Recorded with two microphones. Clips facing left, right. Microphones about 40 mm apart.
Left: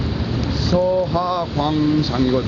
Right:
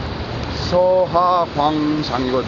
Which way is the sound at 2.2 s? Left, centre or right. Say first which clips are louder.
Left 2 dB; centre.